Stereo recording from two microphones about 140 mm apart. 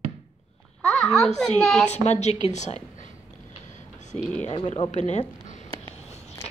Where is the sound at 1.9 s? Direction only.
55° left (ahead or behind).